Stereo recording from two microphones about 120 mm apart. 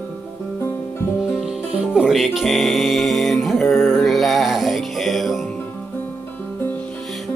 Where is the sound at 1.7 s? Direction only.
5° right (ahead or behind).